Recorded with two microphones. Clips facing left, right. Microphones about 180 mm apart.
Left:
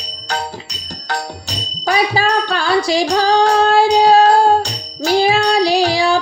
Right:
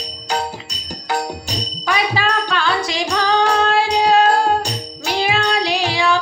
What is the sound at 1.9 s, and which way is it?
Music, 35° left (ahead or behind).